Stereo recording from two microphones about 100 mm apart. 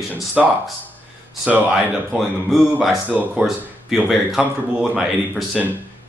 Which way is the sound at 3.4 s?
Centre (ahead or behind).